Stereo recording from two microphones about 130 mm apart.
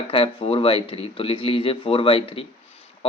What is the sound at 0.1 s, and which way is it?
Speech, 45° left (ahead or behind).